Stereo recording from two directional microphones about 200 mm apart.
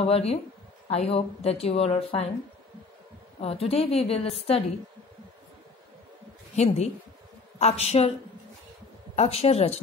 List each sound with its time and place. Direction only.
0.0 s a woman's voice: 30° left (ahead or behind)
3.3 s a woman's voice: 30° left (ahead or behind)
6.5 s a woman's voice: 35° left (ahead or behind)
9.1 s a woman's voice: 30° left (ahead or behind)